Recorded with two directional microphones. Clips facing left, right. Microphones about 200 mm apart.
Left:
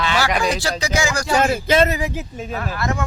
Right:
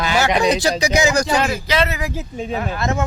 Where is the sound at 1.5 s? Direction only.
50° left (ahead or behind).